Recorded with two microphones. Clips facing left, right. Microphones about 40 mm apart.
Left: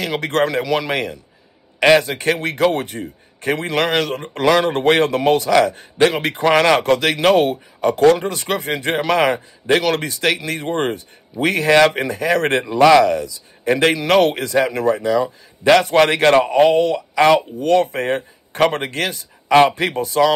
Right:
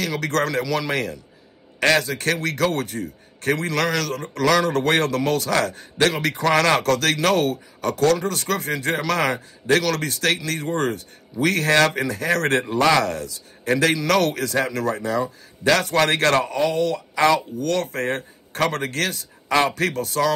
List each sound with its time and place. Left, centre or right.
0.0 s a man's voice: left
15.0 s speech: left
16.5 s speech: left